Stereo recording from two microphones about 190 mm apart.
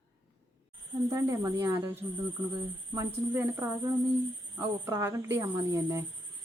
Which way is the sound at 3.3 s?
15° right (ahead or behind).